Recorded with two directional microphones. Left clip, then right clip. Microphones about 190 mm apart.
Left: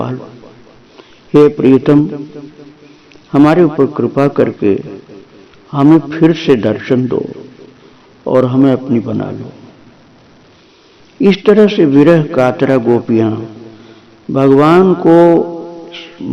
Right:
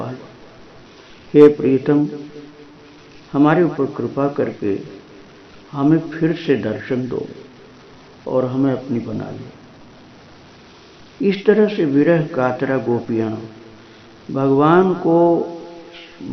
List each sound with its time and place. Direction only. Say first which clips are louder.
1.3 s a man's voice: left 3 dB; 45° left (ahead or behind)
3.3 s a man's voice: left 7 dB; 50° left (ahead or behind)
11.2 s a man's voice: left 7 dB; 45° left (ahead or behind)
14.3 s a man's voice: left 6 dB; 45° left (ahead or behind)
15.9 s cat: left 9 dB; 45° left (ahead or behind)